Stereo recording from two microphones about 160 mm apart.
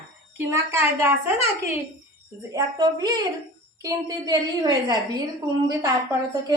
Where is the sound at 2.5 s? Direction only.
25° right (ahead or behind).